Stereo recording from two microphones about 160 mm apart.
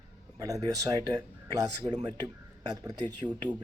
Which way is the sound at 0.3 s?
20° right (ahead or behind).